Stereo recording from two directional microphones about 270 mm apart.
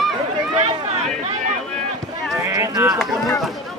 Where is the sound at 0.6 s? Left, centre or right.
Right.